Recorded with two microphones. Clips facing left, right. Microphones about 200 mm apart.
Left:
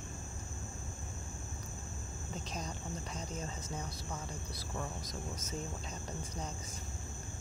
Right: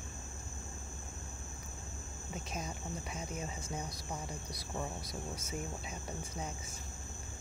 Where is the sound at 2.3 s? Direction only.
5° right (ahead or behind).